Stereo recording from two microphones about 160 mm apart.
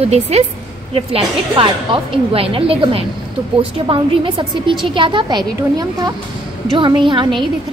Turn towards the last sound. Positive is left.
turn(degrees=-30)  # may be behind; listen again after turning